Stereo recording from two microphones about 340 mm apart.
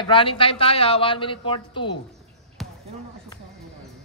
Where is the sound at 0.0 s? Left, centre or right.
Centre.